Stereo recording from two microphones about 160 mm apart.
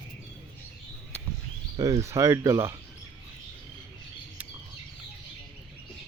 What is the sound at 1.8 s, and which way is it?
Speech, 20° right (ahead or behind).